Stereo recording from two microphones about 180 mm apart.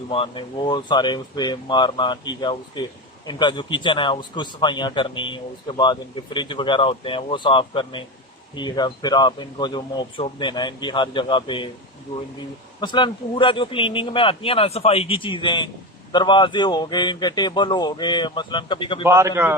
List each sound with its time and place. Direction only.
0.1 s a man's voice: 30° left (ahead or behind)
12.8 s a man's voice: 25° left (ahead or behind)
19.0 s a man's voice: 15° right (ahead or behind)